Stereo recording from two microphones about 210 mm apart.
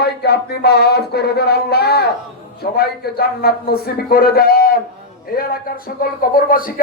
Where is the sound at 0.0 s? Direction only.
50° left (ahead or behind).